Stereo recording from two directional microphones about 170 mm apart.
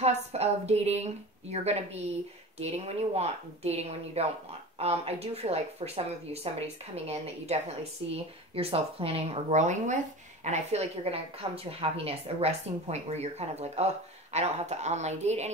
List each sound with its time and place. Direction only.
0.0 s a woman's voice: 40° right (ahead or behind)